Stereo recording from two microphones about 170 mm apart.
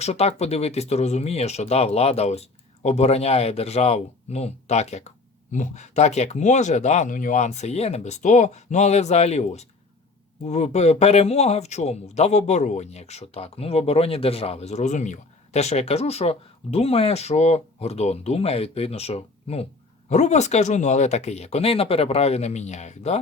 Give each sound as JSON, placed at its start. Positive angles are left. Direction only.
{"t": 0.0, "sound": "speech", "side_deg": 40}